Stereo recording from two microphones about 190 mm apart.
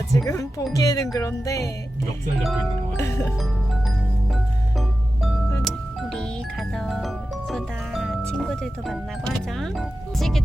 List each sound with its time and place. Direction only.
0.3 s speech: 15° left (ahead or behind)
3.0 s speech: 15° left (ahead or behind)
5.6 s music: centre (ahead or behind)